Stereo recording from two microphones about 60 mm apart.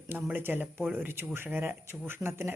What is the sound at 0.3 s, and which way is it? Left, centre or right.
A woman's voice, right.